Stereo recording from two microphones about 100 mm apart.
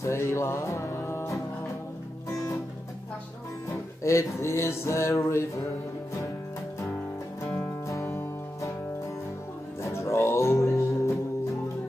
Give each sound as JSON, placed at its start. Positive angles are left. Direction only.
{"t": 0.0, "sound": "music", "side_deg": 30}
{"t": 3.7, "sound": "music", "side_deg": 30}
{"t": 7.9, "sound": "music", "side_deg": 25}
{"t": 9.8, "sound": "music", "side_deg": 30}